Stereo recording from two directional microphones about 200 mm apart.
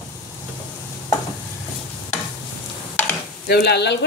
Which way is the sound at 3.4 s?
50° left (ahead or behind).